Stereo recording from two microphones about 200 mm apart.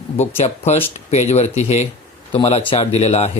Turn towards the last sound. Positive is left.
turn(degrees=30)  # may be behind; listen again after turning